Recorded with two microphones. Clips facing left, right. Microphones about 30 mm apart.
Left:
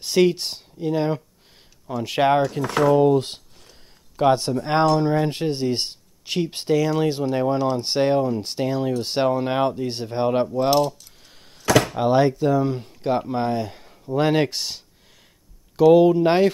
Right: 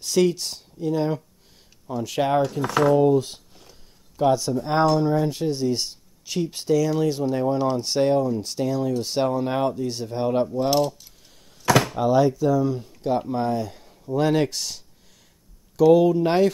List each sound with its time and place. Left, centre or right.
0.0 s speech: left
3.2 s speech: left
10.7 s mechanisms: centre
12.0 s speech: left